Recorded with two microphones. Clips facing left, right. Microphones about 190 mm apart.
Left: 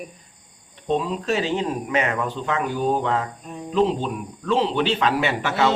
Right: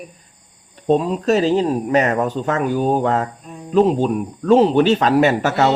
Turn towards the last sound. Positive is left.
turn(degrees=-40)  # may be behind; listen again after turning